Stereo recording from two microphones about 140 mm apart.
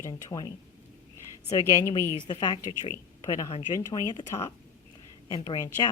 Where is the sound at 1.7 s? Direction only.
20° left (ahead or behind).